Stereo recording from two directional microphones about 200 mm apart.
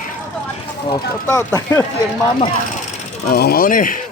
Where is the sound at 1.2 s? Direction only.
15° left (ahead or behind).